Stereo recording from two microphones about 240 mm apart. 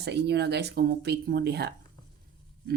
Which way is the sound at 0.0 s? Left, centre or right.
Right.